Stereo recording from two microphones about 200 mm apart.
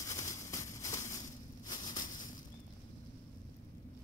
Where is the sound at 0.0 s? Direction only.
15° left (ahead or behind).